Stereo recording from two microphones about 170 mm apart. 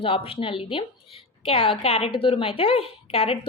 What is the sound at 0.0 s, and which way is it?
A woman's voice, 30° left (ahead or behind).